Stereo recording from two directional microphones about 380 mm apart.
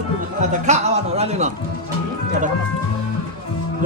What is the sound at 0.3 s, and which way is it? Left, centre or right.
A man's voice, centre.